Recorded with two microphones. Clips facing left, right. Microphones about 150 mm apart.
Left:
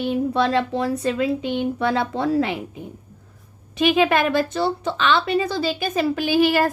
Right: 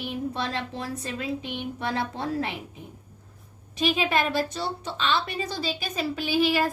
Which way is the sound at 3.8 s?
65° left (ahead or behind).